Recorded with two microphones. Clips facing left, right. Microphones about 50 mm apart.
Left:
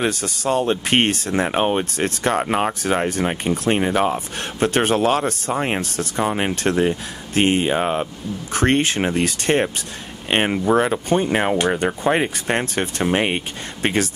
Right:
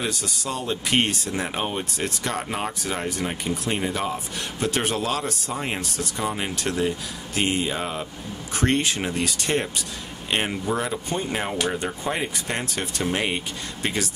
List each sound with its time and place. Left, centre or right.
0.0 s speech: left
12.4 s speech: left